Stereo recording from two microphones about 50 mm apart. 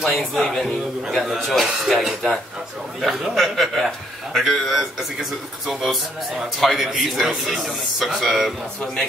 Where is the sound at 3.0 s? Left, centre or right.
Centre.